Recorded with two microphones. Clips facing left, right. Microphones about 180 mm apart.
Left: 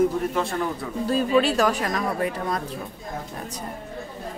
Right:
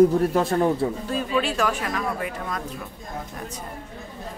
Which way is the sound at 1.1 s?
35° left (ahead or behind).